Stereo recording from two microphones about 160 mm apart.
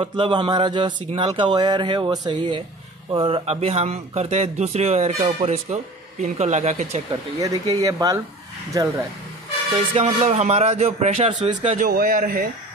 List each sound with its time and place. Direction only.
0.0 s a man's voice: 30° right (ahead or behind); by 7.0 s 45° right (ahead or behind)
7.1 s speech: 20° right (ahead or behind)
9.8 s a man's voice: 35° right (ahead or behind)
11.7 s a man's voice: 60° right (ahead or behind)